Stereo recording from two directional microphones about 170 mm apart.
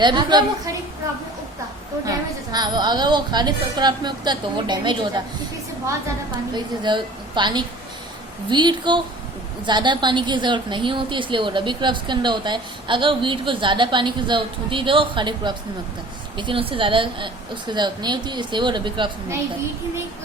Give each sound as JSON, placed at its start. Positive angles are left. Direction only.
{"t": 0.0, "sound": "a woman's voice", "side_deg": -25}
{"t": 2.0, "sound": "a woman's voice", "side_deg": -25}
{"t": 6.5, "sound": "a woman's voice", "side_deg": -25}